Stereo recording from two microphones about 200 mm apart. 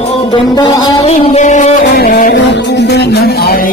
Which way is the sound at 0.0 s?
30° left (ahead or behind).